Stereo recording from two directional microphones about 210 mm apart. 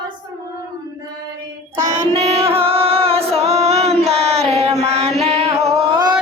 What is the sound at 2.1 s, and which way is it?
Music, 30° right (ahead or behind).